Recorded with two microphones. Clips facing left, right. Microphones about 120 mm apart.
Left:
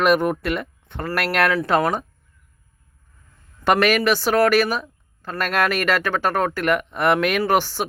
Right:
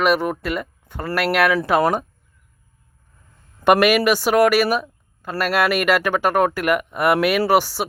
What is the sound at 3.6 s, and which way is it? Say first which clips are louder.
Speech: right 3 dB; 10° right (ahead or behind).